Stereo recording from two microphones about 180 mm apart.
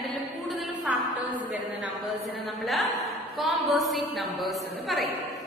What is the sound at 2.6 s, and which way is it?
A woman's voice, centre (ahead or behind).